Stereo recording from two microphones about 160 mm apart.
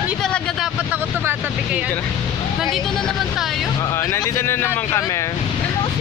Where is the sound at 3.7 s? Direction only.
20° left (ahead or behind).